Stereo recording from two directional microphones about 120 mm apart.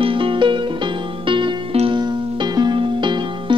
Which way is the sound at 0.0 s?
45° right (ahead or behind).